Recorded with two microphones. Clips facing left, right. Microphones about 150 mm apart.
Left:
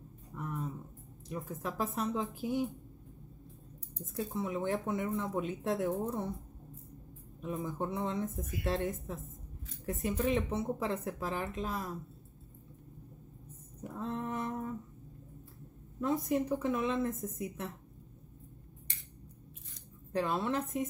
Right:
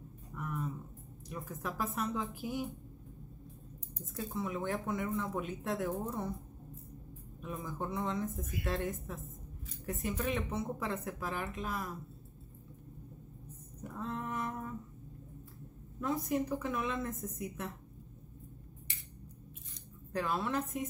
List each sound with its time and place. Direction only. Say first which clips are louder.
0.3 s a sound: even; 30° left (ahead or behind)
1.3 s speech: left 2 dB; 25° left (ahead or behind)
4.4 s speech: left 2 dB; 25° left (ahead or behind)
7.4 s speech: left 4 dB; 25° left (ahead or behind)
13.9 s a sound: left 2 dB; 25° left (ahead or behind)
16.0 s speech: left 2 dB; 25° left (ahead or behind)
20.1 s speech: left 2 dB; 25° left (ahead or behind)